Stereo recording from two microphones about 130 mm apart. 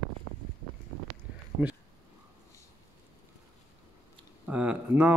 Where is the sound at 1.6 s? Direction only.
15° right (ahead or behind).